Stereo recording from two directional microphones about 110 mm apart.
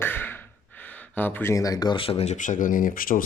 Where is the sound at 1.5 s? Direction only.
35° left (ahead or behind).